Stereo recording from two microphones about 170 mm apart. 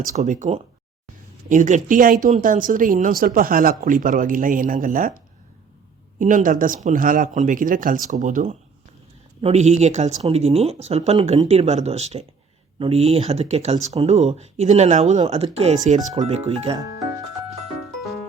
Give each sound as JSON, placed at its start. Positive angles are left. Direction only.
{"t": 0.0, "sound": "speech", "side_deg": -45}
{"t": 6.1, "sound": "speech", "side_deg": -50}